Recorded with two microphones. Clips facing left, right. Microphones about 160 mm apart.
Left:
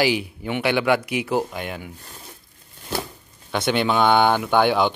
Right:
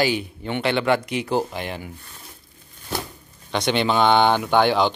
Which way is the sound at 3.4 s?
5° left (ahead or behind).